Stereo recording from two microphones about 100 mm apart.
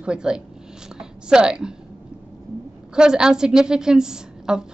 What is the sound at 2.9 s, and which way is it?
A woman's voice, 5° right (ahead or behind).